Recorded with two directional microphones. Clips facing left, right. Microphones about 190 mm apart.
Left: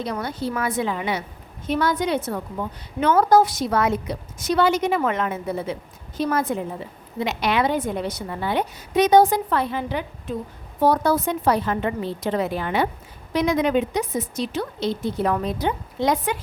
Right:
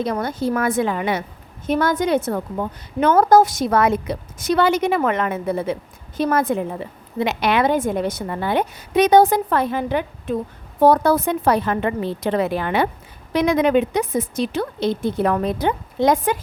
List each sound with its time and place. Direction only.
0.0 s a woman's voice: 50° right (ahead or behind)